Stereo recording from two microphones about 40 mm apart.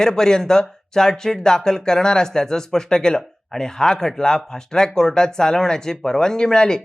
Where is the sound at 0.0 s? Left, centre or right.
Centre.